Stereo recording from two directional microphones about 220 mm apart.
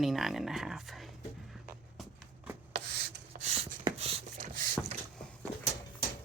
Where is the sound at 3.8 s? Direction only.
30° right (ahead or behind).